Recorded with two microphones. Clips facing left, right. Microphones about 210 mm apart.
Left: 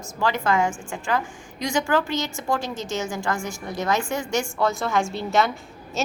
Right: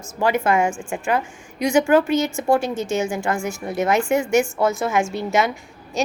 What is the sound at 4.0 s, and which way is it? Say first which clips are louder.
A woman's voice: right 7 dB; 10° right (ahead or behind).